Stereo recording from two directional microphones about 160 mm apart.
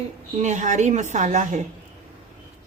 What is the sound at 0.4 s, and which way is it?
A woman's voice, 50° right (ahead or behind).